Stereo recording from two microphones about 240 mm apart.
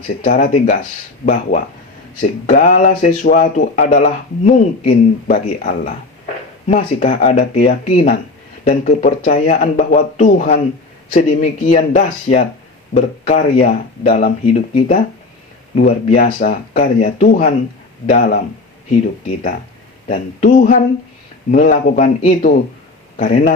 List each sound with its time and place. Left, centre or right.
0.3 s speech: left
20.1 s a man's voice: left